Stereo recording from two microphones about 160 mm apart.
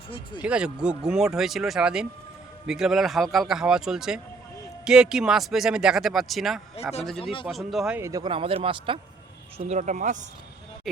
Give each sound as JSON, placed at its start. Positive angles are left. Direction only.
{"t": 0.1, "sound": "speech", "side_deg": 30}
{"t": 0.4, "sound": "speech", "side_deg": -5}
{"t": 7.9, "sound": "speech", "side_deg": -20}
{"t": 8.3, "sound": "speech", "side_deg": -35}
{"t": 9.6, "sound": "speech", "side_deg": -45}